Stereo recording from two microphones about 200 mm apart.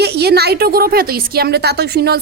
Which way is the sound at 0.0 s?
55° right (ahead or behind).